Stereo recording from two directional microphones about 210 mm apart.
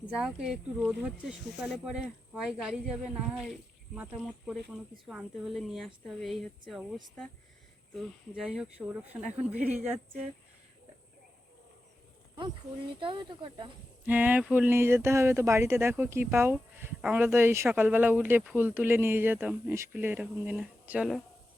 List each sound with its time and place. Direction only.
0.2 s speech: 5° right (ahead or behind)
12.4 s speech: 25° right (ahead or behind)
14.0 s speech: 10° right (ahead or behind)